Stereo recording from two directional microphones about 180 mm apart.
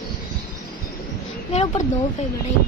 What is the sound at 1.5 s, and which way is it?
Speech, 35° left (ahead or behind).